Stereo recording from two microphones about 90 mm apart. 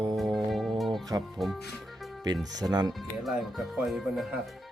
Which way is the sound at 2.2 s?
45° right (ahead or behind).